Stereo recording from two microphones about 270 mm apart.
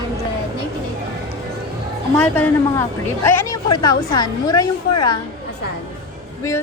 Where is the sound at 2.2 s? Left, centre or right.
Centre.